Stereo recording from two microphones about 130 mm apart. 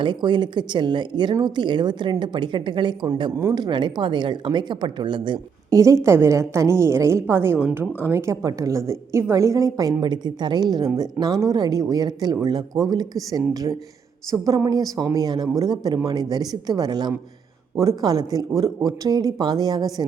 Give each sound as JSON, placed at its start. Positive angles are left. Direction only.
{"t": 0.0, "sound": "a woman's voice", "side_deg": -35}
{"t": 3.3, "sound": "a woman's voice", "side_deg": -20}
{"t": 3.6, "sound": "a woman's voice", "side_deg": -35}
{"t": 5.7, "sound": "a woman's voice", "side_deg": -25}